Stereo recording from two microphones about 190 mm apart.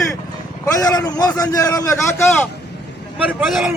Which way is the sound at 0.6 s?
20° left (ahead or behind).